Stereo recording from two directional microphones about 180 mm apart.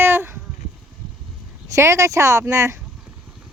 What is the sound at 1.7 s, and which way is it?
Speech, 15° right (ahead or behind).